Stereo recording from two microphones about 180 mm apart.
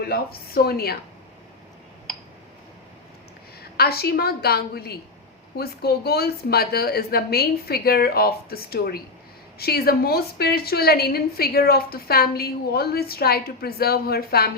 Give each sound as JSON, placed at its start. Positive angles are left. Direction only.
{"t": 0.0, "sound": "a woman's voice", "side_deg": 60}
{"t": 3.6, "sound": "a woman's voice", "side_deg": 60}